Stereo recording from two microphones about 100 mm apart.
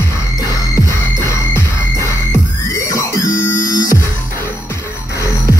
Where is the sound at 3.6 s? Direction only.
35° left (ahead or behind).